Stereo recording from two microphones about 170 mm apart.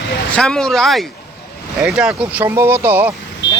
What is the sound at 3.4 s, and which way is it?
Vehicle, 90° left.